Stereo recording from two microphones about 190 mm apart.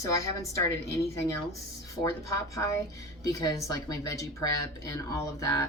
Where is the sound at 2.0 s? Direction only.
15° left (ahead or behind).